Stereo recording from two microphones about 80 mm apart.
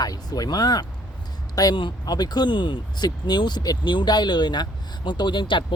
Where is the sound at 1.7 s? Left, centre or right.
Left.